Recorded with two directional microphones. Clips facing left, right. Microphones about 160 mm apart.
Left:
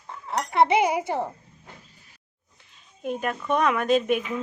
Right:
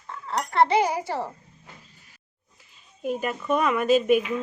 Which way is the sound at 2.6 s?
5° right (ahead or behind).